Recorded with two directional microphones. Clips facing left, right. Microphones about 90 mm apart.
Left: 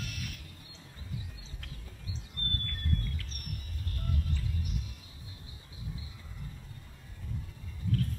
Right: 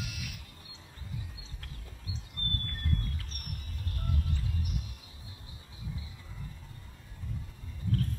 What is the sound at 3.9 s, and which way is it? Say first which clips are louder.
Music: right 1 dB; 35° right (ahead or behind).